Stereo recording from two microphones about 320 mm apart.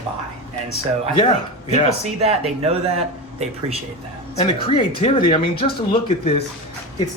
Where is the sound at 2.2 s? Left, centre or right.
Centre.